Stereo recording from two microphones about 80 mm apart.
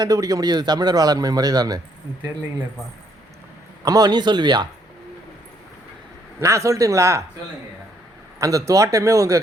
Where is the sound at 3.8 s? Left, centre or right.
Right.